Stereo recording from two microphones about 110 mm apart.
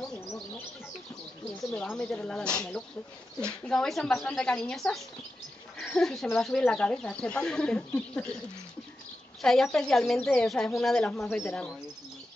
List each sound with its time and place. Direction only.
0.0 s bird: 5° left (ahead or behind)
1.6 s bird: 5° left (ahead or behind)
1.9 s speech: 10° left (ahead or behind)
9.4 s speech: 5° left (ahead or behind)